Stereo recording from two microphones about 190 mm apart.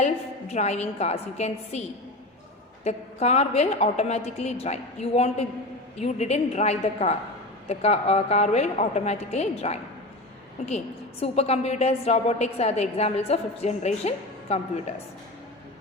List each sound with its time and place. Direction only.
0.0 s a woman's voice: 35° left (ahead or behind)
2.8 s a woman's voice: 35° left (ahead or behind)